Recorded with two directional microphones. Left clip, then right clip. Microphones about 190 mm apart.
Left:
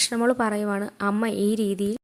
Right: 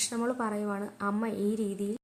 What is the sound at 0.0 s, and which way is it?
A woman's voice, 35° left (ahead or behind).